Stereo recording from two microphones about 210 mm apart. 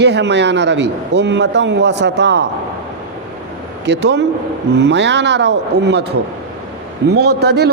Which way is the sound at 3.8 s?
55° right (ahead or behind).